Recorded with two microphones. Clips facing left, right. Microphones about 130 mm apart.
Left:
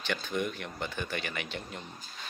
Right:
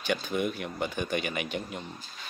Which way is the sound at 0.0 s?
10° right (ahead or behind).